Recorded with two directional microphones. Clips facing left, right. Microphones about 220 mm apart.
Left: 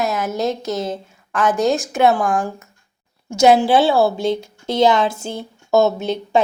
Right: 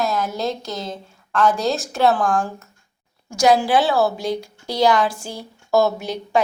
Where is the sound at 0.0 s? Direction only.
Centre (ahead or behind).